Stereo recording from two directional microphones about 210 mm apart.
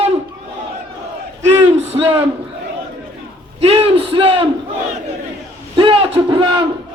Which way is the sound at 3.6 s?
25° right (ahead or behind).